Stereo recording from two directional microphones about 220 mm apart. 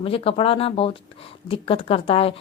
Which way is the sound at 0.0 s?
25° left (ahead or behind).